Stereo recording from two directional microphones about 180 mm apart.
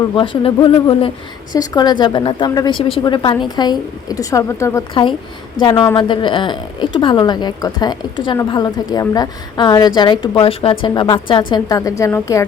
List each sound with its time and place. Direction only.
0.2 s a woman's voice: 30° left (ahead or behind)